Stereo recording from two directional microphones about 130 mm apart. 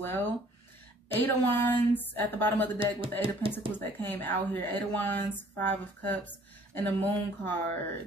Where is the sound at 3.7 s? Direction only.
15° left (ahead or behind).